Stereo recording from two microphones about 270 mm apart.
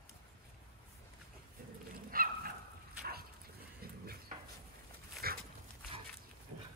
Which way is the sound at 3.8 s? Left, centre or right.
Right.